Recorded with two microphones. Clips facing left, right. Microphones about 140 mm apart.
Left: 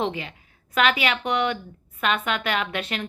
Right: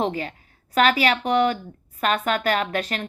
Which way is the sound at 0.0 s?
40° right (ahead or behind).